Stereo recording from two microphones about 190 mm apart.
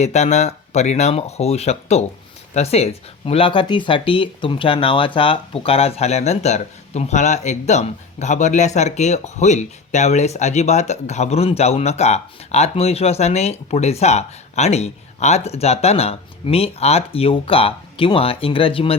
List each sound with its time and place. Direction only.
0.0 s speech: 35° left (ahead or behind)